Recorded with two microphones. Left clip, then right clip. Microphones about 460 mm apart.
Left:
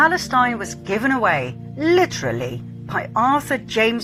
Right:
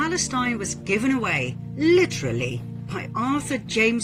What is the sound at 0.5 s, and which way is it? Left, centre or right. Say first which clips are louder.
Speech: left 1 dB; left.